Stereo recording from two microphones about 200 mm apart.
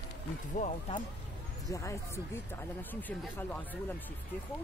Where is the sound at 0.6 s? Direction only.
40° left (ahead or behind).